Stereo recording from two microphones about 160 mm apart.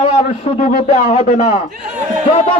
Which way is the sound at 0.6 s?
45° left (ahead or behind).